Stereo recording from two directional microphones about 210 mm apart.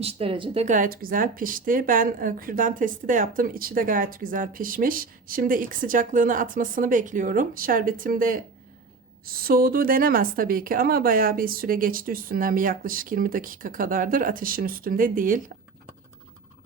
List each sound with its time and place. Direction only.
0.0 s a woman's voice: 25° right (ahead or behind)